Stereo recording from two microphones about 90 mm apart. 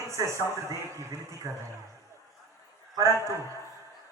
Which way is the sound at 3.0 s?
35° right (ahead or behind).